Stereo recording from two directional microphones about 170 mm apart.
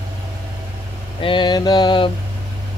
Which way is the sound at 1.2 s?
30° left (ahead or behind).